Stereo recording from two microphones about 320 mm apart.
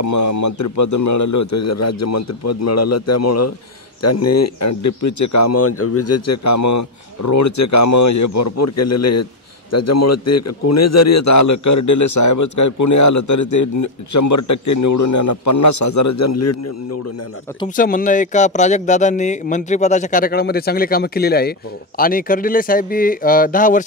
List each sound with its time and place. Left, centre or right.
0.0 s speech: left
17.7 s speech: left